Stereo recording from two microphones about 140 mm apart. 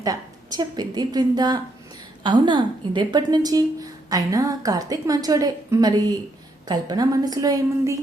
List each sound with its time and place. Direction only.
0.0 s a woman's voice: 25° right (ahead or behind)